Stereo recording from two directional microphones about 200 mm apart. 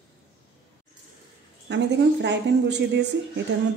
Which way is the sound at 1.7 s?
60° right (ahead or behind).